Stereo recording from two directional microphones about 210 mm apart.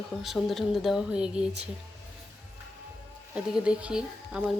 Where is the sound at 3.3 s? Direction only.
5° right (ahead or behind).